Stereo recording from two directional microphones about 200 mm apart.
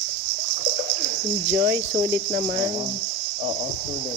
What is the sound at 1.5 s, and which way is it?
Speech, 55° right (ahead or behind).